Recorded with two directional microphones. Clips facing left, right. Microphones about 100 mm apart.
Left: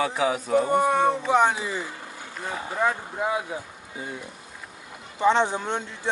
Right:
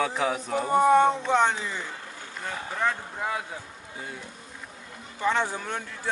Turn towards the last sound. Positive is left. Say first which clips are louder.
# left 4 dB
turn(degrees=20)  # may be behind; listen again after turning